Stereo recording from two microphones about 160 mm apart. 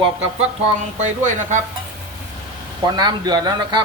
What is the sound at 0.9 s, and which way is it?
Speech, 50° right (ahead or behind).